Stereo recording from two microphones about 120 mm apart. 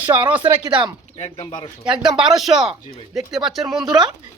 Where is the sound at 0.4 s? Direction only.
40° right (ahead or behind).